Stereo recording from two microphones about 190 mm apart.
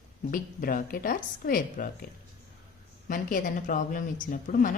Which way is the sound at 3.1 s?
45° left (ahead or behind).